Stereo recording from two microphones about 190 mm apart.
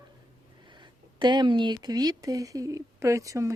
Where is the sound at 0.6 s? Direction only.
25° right (ahead or behind).